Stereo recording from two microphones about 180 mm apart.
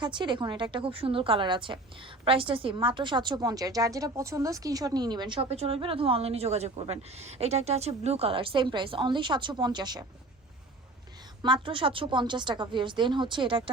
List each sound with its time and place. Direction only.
0.0 s a woman's voice: 25° right (ahead or behind)
11.4 s a woman's voice: 25° right (ahead or behind)